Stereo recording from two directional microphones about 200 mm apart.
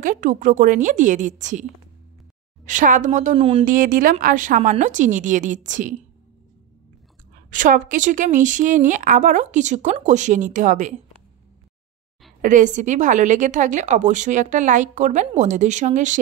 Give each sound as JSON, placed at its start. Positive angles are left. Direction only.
{"t": 0.0, "sound": "a woman's voice", "side_deg": -40}
{"t": 3.6, "sound": "a woman's voice", "side_deg": -45}
{"t": 7.5, "sound": "a woman's voice", "side_deg": -40}
{"t": 12.4, "sound": "a woman's voice", "side_deg": -40}